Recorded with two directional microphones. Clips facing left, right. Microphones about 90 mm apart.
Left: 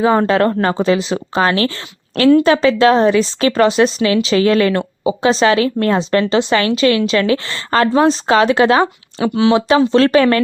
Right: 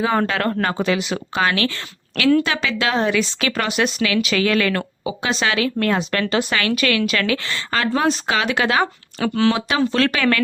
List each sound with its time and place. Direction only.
0.0 s a woman's voice: 30° left (ahead or behind)
9.3 s speech: 15° left (ahead or behind)
9.6 s a woman's voice: 30° left (ahead or behind)